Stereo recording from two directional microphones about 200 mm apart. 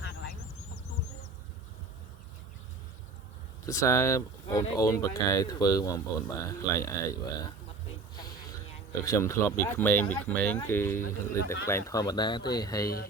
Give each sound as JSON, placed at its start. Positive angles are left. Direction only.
{"t": 0.0, "sound": "vehicle", "side_deg": 55}
{"t": 3.7, "sound": "speech", "side_deg": 15}
{"t": 8.9, "sound": "speech", "side_deg": 15}